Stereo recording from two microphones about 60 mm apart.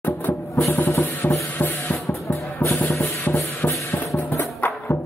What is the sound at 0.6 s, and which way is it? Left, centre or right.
Music, left.